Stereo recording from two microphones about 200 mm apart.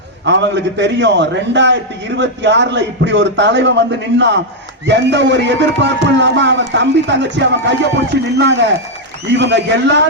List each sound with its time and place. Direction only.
0.3 s a man's voice: 60° right (ahead or behind)